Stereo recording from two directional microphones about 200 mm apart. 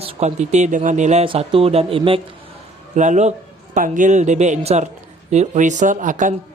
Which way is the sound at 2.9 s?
35° right (ahead or behind).